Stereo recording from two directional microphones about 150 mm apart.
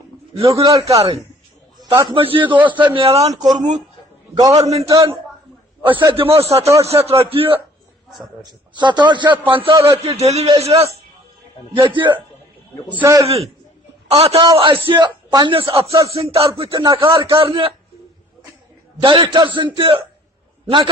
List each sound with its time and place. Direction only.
0.4 s a man's voice: 20° right (ahead or behind)
2.0 s speech: 35° right (ahead or behind)
3.3 s a man's voice: 25° right (ahead or behind)
4.6 s a man's voice: 45° right (ahead or behind)
4.9 s a man's voice: 20° right (ahead or behind)
5.8 s a man's voice: 35° right (ahead or behind)
9.7 s a man's voice: 20° right (ahead or behind)
10.0 s a man's voice: 45° right (ahead or behind)
12.9 s a man's voice: 10° right (ahead or behind)
14.2 s speech: 40° right (ahead or behind)
19.0 s speech: 35° right (ahead or behind)